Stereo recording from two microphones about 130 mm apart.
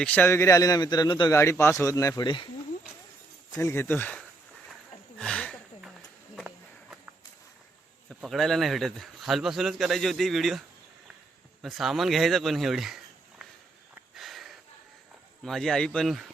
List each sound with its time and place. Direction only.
0.0 s a man's voice: 10° left (ahead or behind); by 1.3 s 35° left (ahead or behind)
1.3 s a man's voice: 20° left (ahead or behind)
2.2 s speech: 40° left (ahead or behind)
3.6 s speech: 20° left (ahead or behind)
5.1 s a sound: 5° left (ahead or behind)
8.2 s a man's voice: centre (ahead or behind)
11.6 s a man's voice: centre (ahead or behind)
14.2 s sniff: centre (ahead or behind)
15.4 s a man's voice: 5° left (ahead or behind)